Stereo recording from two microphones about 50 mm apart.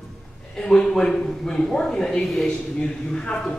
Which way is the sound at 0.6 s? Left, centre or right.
Centre.